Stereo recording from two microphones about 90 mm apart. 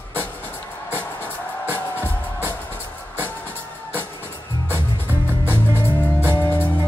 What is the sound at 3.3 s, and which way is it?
Music, 20° left (ahead or behind).